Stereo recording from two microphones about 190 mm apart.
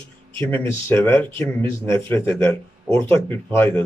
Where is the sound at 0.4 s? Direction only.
10° left (ahead or behind).